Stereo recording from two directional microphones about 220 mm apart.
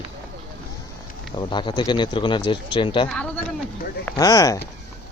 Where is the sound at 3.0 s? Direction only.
5° left (ahead or behind).